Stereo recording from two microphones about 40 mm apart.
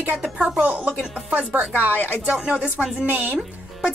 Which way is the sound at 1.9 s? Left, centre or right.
Left.